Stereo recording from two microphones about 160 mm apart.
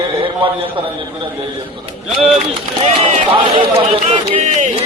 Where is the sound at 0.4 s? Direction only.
35° right (ahead or behind).